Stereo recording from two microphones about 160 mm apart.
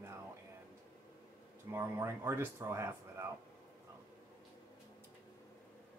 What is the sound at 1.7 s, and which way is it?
Speech, 15° right (ahead or behind).